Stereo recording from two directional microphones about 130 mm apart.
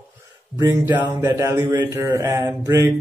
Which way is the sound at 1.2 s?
20° right (ahead or behind).